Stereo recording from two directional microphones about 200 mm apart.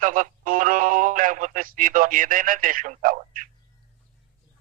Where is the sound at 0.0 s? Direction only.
40° right (ahead or behind).